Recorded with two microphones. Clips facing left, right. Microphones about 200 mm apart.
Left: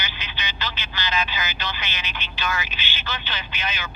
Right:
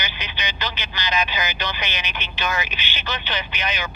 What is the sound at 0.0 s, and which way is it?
Speech, 15° right (ahead or behind).